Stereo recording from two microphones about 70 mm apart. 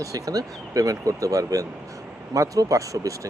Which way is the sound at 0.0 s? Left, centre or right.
Right.